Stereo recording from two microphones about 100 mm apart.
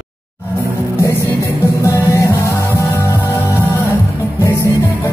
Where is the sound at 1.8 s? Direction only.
30° left (ahead or behind).